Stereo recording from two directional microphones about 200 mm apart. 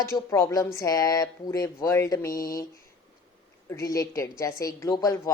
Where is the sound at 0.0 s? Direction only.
15° left (ahead or behind).